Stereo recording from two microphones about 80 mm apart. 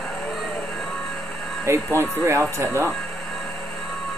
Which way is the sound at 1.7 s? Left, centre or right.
Right.